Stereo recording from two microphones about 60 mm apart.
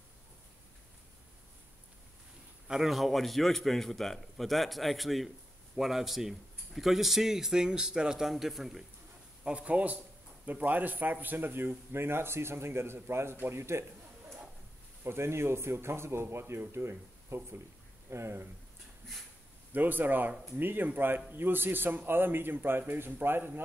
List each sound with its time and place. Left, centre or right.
2.7 s speech: centre
9.4 s a man's voice: centre; by 13.8 s right
15.0 s speech: right
19.7 s speech: right